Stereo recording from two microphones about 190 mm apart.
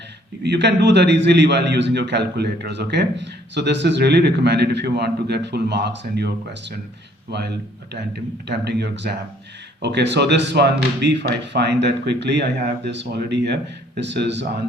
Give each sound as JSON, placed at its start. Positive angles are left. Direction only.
{"t": 0.4, "sound": "a man's voice", "side_deg": -65}